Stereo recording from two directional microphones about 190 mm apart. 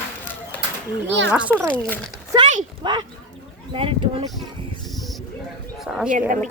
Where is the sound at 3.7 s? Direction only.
30° right (ahead or behind).